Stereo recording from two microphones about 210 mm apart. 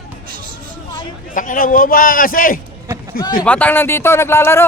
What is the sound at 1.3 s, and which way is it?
A man's voice, 40° left (ahead or behind).